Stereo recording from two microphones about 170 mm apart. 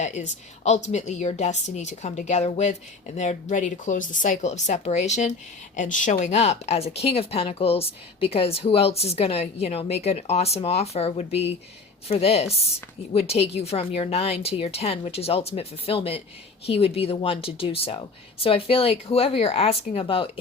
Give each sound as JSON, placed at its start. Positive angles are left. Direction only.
{"t": 0.0, "sound": "a woman's voice", "side_deg": 45}